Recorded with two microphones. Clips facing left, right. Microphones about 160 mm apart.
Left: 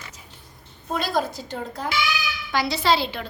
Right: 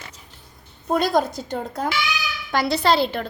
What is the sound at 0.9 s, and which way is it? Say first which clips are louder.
A woman's voice: right 5 dB; 50° right (ahead or behind).